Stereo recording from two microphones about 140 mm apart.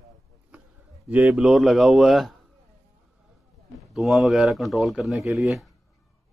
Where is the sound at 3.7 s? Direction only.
Centre (ahead or behind).